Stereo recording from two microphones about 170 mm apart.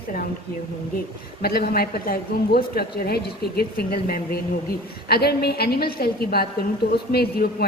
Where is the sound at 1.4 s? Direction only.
65° left (ahead or behind).